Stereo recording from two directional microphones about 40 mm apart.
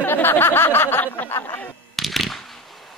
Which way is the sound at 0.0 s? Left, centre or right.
Left.